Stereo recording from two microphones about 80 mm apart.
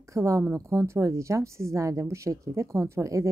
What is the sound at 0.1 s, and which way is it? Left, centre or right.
Speech, right.